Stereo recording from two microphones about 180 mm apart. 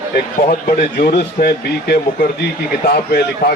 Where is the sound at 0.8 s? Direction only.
60° left (ahead or behind).